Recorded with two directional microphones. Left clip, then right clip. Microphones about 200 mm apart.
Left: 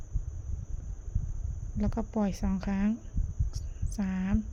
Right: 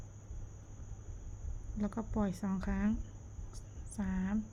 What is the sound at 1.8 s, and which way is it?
A woman's voice, 30° left (ahead or behind).